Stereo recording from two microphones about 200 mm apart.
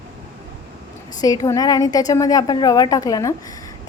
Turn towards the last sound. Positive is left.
turn(degrees=15)  # may be behind; listen again after turning